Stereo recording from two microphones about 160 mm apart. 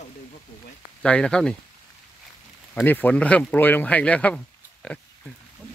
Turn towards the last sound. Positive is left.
turn(degrees=10)  # may be behind; listen again after turning